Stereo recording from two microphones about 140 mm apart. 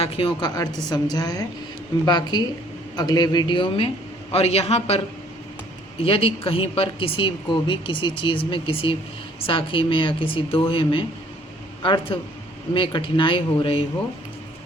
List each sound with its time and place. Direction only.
0.0 s a woman's voice: 40° left (ahead or behind)